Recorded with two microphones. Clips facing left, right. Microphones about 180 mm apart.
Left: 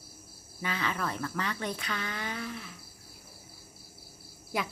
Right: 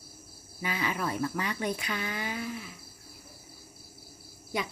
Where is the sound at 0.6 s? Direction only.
10° right (ahead or behind).